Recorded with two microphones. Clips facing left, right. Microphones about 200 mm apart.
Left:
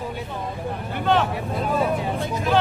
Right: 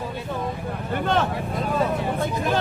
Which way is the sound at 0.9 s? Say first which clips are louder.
Left 2 dB; 45° right (ahead or behind).